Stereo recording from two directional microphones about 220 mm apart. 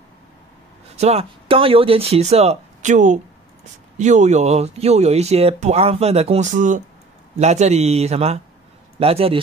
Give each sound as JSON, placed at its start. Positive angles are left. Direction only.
{"t": 0.9, "sound": "speech", "side_deg": -30}